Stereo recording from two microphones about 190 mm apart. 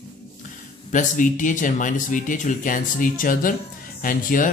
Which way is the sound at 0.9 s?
40° left (ahead or behind).